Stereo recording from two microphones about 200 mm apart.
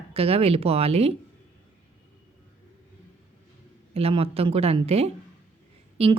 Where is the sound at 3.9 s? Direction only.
30° right (ahead or behind).